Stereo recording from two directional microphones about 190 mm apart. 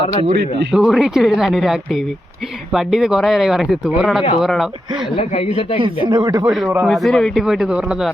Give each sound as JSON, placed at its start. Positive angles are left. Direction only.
{"t": 0.0, "sound": "a man's voice", "side_deg": 25}
{"t": 0.7, "sound": "speech", "side_deg": -5}
{"t": 5.1, "sound": "speech", "side_deg": 30}
{"t": 6.1, "sound": "speech", "side_deg": -20}
{"t": 6.8, "sound": "speech", "side_deg": 0}